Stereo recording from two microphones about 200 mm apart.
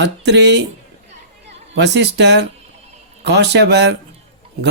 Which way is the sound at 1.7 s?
60° right (ahead or behind).